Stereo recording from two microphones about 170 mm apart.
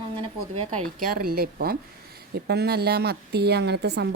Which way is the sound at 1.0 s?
55° right (ahead or behind).